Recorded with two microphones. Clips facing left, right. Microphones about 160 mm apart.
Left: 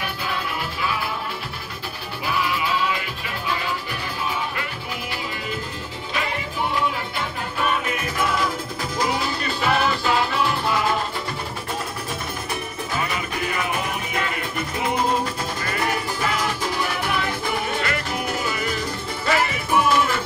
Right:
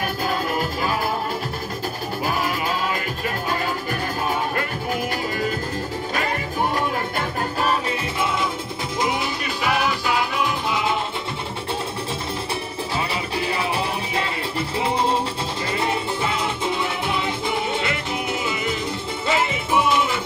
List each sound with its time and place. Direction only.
0.3 s music: 45° right (ahead or behind)
2.2 s music: 45° right (ahead or behind)
6.1 s music: 45° right (ahead or behind); by 11.0 s 20° right (ahead or behind)
12.9 s music: 30° right (ahead or behind)
14.8 s music: 30° right (ahead or behind)